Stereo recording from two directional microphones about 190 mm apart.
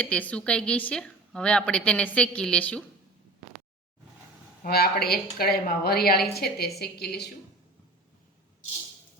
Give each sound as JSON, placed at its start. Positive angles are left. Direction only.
{"t": 0.0, "sound": "a woman's voice", "side_deg": 5}
{"t": 4.6, "sound": "a woman's voice", "side_deg": 55}